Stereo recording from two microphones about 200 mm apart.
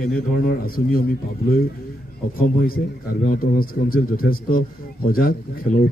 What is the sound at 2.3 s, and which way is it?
Speech, 45° left (ahead or behind).